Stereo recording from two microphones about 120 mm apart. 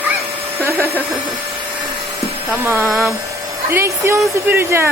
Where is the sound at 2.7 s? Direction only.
20° right (ahead or behind).